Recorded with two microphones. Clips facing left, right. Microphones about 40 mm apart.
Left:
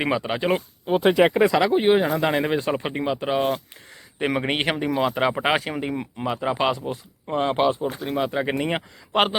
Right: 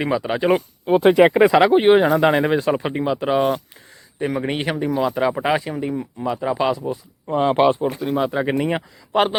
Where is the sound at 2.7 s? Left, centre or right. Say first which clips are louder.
Right 4 dB; centre.